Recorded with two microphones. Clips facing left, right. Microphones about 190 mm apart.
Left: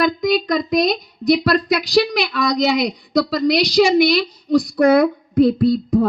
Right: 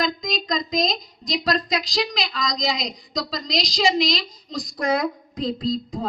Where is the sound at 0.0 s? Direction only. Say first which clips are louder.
Left 8 dB; 65° left (ahead or behind).